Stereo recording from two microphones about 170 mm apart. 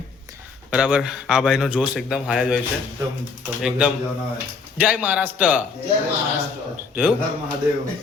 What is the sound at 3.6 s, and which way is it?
Speech, 5° right (ahead or behind).